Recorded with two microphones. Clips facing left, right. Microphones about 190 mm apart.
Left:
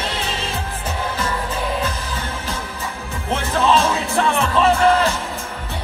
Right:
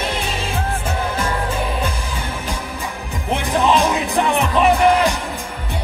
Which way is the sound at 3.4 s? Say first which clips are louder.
Right 1 dB; 15° right (ahead or behind).